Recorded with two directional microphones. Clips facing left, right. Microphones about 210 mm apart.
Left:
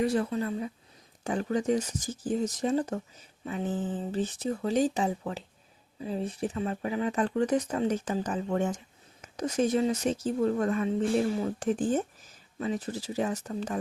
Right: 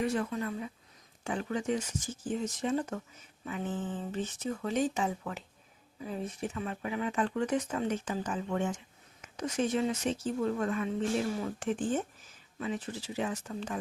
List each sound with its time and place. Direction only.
0.0 s speech: 35° left (ahead or behind)